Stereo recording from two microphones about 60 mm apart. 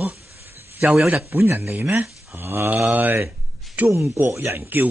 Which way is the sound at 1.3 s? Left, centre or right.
Right.